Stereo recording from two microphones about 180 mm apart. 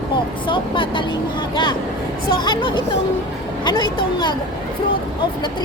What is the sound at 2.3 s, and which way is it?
Speech, 25° left (ahead or behind).